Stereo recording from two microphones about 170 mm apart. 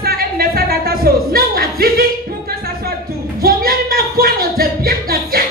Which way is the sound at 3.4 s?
60° right (ahead or behind).